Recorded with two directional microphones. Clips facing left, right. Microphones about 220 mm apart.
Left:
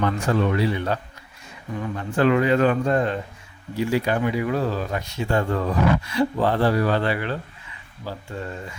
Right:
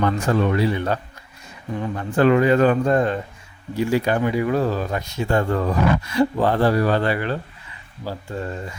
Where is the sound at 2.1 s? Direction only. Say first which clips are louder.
Right 3 dB; 40° right (ahead or behind).